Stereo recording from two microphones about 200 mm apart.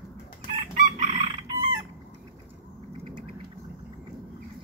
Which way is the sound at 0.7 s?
35° right (ahead or behind).